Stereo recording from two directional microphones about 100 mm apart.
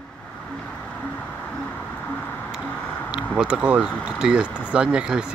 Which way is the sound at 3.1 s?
10° right (ahead or behind).